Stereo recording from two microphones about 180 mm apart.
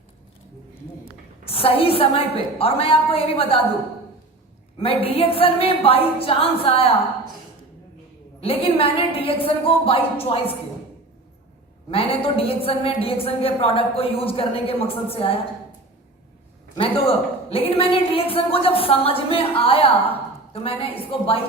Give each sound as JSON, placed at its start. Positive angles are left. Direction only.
{"t": 1.5, "sound": "a woman's voice", "side_deg": 30}
{"t": 4.8, "sound": "a woman's voice", "side_deg": 30}
{"t": 8.4, "sound": "a woman's voice", "side_deg": 30}
{"t": 11.9, "sound": "a woman's voice", "side_deg": 30}
{"t": 16.7, "sound": "a woman's voice", "side_deg": 30}